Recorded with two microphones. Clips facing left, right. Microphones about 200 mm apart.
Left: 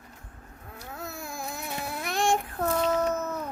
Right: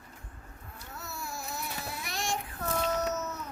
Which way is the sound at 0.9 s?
50° left (ahead or behind).